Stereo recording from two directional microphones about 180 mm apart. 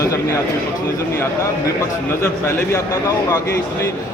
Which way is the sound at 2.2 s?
15° left (ahead or behind).